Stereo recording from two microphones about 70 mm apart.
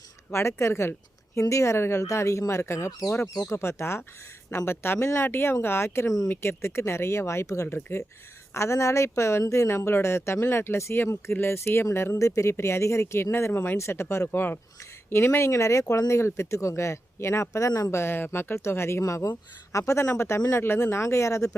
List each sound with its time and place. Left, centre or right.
0.3 s speech: left
17.9 s speech: left